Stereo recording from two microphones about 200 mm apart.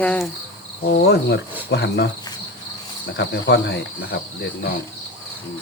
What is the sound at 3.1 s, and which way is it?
Cricket, 60° left (ahead or behind).